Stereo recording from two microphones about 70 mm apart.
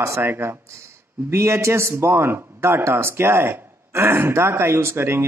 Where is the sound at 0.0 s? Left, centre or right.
Right.